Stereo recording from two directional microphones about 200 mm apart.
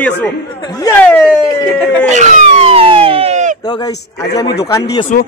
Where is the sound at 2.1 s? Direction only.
35° right (ahead or behind).